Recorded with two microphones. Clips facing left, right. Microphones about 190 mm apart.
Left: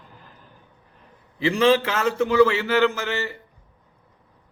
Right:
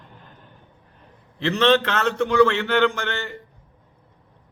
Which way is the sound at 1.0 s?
5° left (ahead or behind).